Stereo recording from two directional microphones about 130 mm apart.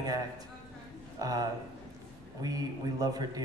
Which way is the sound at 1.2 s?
30° right (ahead or behind).